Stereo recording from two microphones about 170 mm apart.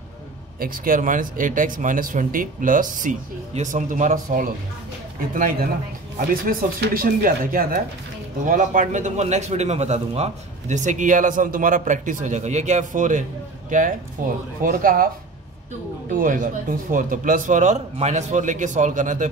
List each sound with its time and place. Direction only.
0.6 s a man's voice: 55° right (ahead or behind)
16.1 s a man's voice: 50° right (ahead or behind)